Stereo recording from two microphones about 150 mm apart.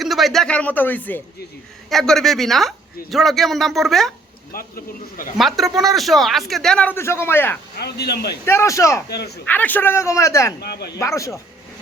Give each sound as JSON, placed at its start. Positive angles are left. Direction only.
{"t": 0.0, "sound": "speech", "side_deg": 0}
{"t": 1.9, "sound": "a man's voice", "side_deg": 0}
{"t": 4.5, "sound": "a man's voice", "side_deg": 70}
{"t": 5.4, "sound": "a man's voice", "side_deg": 0}
{"t": 7.8, "sound": "speech", "side_deg": 90}
{"t": 8.4, "sound": "speech", "side_deg": 20}
{"t": 9.0, "sound": "speech", "side_deg": 90}
{"t": 9.5, "sound": "speech", "side_deg": 10}
{"t": 10.6, "sound": "speech", "side_deg": 90}
{"t": 11.0, "sound": "speech", "side_deg": 20}